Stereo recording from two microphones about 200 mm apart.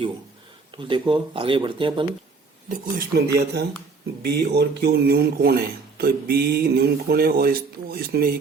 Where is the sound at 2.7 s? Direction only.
50° right (ahead or behind).